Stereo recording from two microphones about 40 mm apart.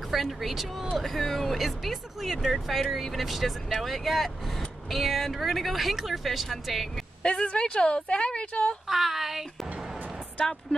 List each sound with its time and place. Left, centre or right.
0.1 s speech: centre
7.2 s a woman's voice: left
8.8 s a sound: centre